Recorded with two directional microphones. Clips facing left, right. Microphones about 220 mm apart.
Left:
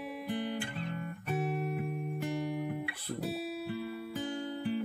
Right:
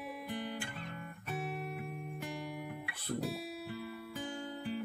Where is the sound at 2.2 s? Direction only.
25° left (ahead or behind).